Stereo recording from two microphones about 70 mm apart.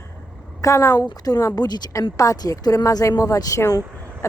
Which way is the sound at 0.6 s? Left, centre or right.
Left.